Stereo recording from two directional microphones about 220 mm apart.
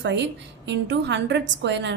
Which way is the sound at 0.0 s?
55° right (ahead or behind).